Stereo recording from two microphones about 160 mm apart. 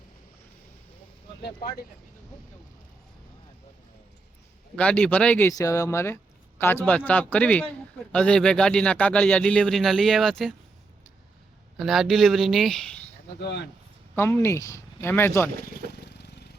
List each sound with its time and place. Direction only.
4.8 s speech: 5° left (ahead or behind)
5.5 s a man's voice: 20° left (ahead or behind); by 10.5 s centre (ahead or behind)
11.8 s a man's voice: centre (ahead or behind)
13.4 s speech: 90° left
14.2 s speech: 15° left (ahead or behind)
15.6 s vehicle: 80° left